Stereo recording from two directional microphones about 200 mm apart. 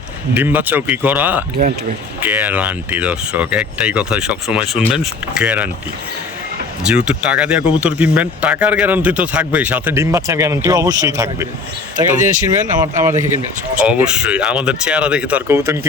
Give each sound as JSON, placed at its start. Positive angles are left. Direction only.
{"t": 0.3, "sound": "speech", "side_deg": -10}
{"t": 6.8, "sound": "speech", "side_deg": -5}
{"t": 12.1, "sound": "speech", "side_deg": -40}
{"t": 13.0, "sound": "speech", "side_deg": -15}